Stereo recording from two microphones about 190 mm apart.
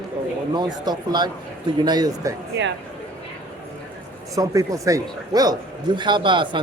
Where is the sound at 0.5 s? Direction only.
20° right (ahead or behind).